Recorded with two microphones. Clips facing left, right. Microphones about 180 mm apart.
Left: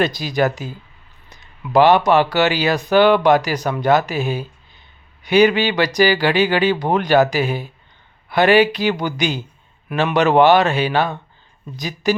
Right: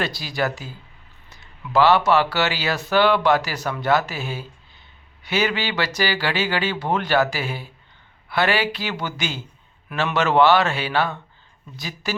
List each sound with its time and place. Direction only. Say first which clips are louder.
0.0 s speech: left 7 dB; 20° left (ahead or behind)